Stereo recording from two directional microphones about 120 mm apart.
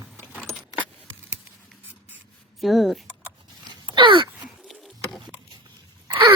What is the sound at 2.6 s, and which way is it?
Speech, centre (ahead or behind).